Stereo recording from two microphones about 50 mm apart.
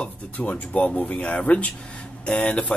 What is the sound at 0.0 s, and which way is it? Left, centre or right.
Speech, left.